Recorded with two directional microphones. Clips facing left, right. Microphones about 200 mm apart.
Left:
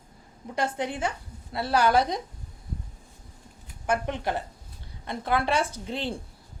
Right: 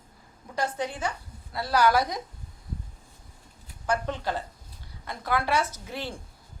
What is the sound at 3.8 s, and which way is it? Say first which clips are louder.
A woman's voice: left 1 dB; 20° left (ahead or behind).